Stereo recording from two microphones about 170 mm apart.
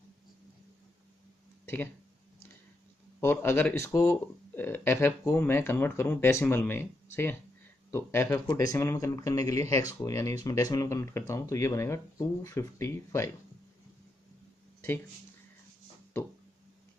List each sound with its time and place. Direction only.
3.2 s speech: 15° left (ahead or behind)